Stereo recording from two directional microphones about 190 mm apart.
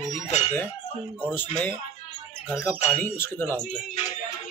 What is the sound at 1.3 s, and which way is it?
Speech, 10° left (ahead or behind).